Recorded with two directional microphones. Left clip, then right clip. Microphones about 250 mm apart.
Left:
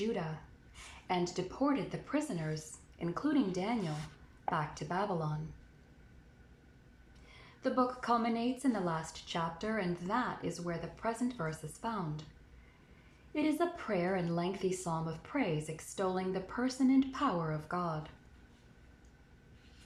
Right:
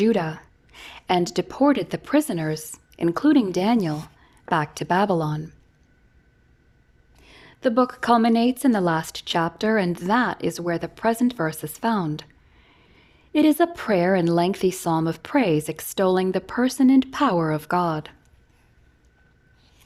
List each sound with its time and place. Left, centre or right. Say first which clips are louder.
0.0 s a woman's voice: right 15 dB; right
7.3 s a woman's voice: right 12 dB; right
13.3 s a woman's voice: right 14 dB; right